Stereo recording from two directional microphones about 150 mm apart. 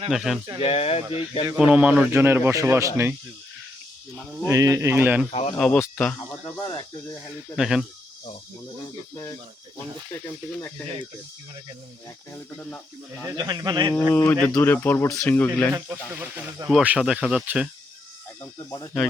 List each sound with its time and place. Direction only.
0.1 s speech: centre (ahead or behind)
0.6 s speech: 45° left (ahead or behind)
1.5 s speech: 5° right (ahead or behind)
4.4 s speech: 20° right (ahead or behind)
5.3 s speech: 45° left (ahead or behind)
5.5 s speech: 5° left (ahead or behind)
6.6 s speech: 30° left (ahead or behind)
7.5 s speech: 5° right (ahead or behind)
13.3 s speech: 25° right (ahead or behind)
14.1 s speech: 10° left (ahead or behind)
15.7 s speech: 15° right (ahead or behind)